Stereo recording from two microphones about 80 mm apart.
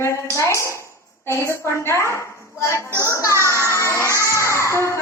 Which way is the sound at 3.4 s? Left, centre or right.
Right.